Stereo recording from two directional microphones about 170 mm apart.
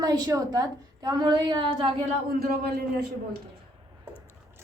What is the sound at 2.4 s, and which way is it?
Speech, 65° right (ahead or behind).